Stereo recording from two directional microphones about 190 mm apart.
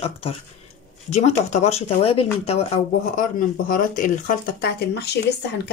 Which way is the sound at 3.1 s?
45° left (ahead or behind).